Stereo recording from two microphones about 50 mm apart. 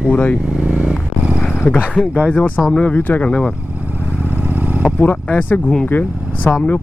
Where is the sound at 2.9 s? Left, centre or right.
Left.